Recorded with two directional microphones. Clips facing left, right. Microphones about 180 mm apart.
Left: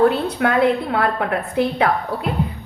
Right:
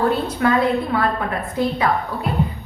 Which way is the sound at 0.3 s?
65° left (ahead or behind).